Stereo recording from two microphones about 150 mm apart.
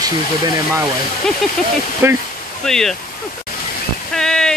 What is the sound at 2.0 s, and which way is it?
Speech, 15° right (ahead or behind).